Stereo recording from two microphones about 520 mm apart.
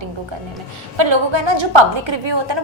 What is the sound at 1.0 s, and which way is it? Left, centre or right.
A woman's voice, right.